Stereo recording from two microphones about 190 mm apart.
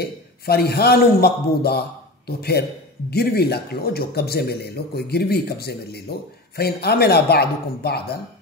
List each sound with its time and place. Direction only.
0.0 s a man's voice: 55° left (ahead or behind)